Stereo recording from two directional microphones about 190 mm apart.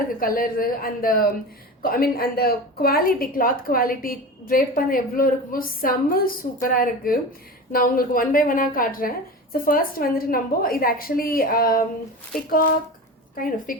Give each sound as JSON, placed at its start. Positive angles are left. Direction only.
{"t": 0.2, "sound": "a woman's voice", "side_deg": 50}